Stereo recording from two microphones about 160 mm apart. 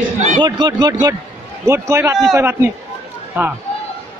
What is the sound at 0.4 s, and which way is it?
Speech, 25° right (ahead or behind).